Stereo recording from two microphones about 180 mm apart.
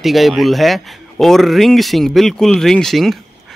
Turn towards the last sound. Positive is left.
turn(degrees=0)  # may be behind; listen again after turning